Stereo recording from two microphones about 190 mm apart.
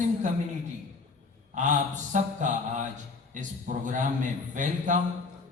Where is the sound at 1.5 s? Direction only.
40° right (ahead or behind).